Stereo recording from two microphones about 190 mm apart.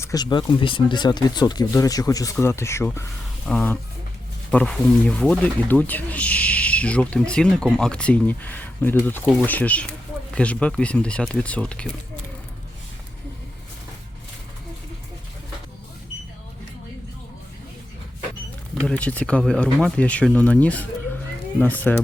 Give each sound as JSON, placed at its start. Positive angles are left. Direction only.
{"t": 0.0, "sound": "speech", "side_deg": 20}
{"t": 18.9, "sound": "speech", "side_deg": 5}